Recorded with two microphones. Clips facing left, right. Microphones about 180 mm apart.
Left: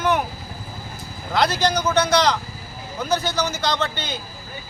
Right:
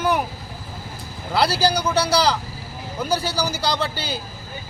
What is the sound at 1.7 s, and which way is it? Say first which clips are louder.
Speech: left 1 dB; 10° right (ahead or behind).